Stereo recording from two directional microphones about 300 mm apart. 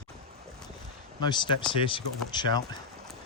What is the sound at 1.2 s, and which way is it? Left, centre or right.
Speech, centre.